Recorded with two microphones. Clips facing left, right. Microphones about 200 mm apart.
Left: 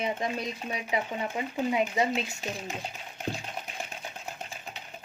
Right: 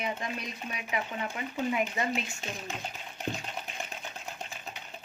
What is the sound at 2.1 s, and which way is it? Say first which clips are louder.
Speech: left 3 dB; 40° left (ahead or behind).